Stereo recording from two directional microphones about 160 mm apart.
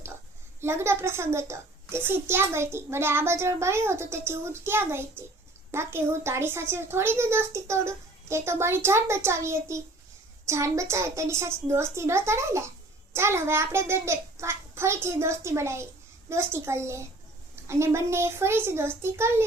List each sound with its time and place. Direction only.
0.6 s a child's voice: 15° right (ahead or behind)